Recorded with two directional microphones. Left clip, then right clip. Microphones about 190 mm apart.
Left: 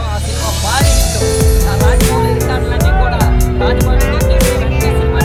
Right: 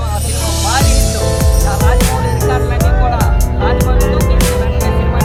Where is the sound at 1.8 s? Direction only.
Centre (ahead or behind).